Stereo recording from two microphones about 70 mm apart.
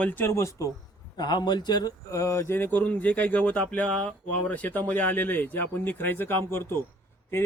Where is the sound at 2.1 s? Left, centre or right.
Left.